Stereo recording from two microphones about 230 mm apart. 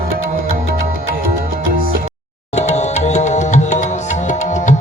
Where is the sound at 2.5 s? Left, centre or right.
Left.